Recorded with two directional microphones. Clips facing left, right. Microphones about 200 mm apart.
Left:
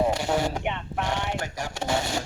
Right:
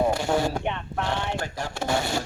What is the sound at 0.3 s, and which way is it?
Speech, 15° left (ahead or behind).